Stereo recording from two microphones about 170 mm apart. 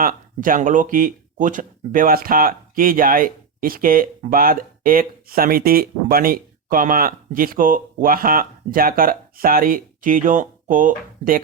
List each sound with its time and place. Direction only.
0.0 s speech: 55° right (ahead or behind)